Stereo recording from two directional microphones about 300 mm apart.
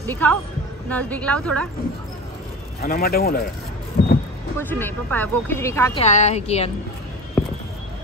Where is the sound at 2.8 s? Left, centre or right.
Left.